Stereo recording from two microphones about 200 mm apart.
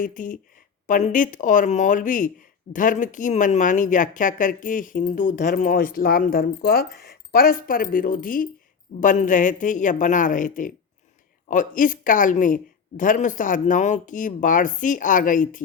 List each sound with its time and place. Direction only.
0.0 s speech: 40° left (ahead or behind)